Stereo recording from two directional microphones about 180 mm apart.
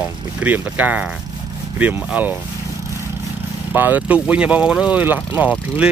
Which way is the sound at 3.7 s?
10° right (ahead or behind).